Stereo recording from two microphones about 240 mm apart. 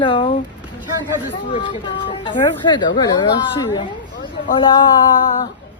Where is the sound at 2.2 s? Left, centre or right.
Centre.